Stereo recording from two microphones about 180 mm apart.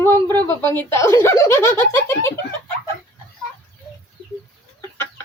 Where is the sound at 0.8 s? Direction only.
15° left (ahead or behind).